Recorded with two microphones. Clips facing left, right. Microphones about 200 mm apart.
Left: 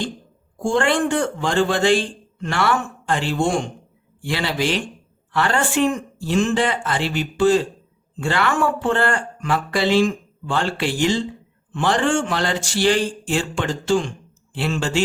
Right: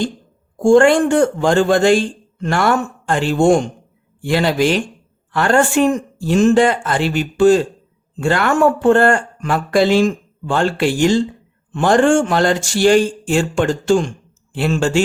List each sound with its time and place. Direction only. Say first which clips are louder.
0.6 s speech: right 9 dB; 45° right (ahead or behind)